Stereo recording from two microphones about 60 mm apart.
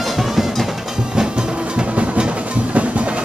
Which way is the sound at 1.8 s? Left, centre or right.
Centre.